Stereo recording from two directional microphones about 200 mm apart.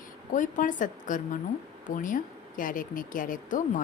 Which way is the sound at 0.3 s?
40° left (ahead or behind).